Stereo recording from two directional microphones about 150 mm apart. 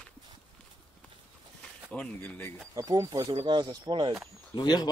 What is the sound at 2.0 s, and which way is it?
Speech, 10° left (ahead or behind).